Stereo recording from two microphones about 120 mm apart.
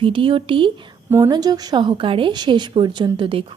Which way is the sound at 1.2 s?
35° right (ahead or behind).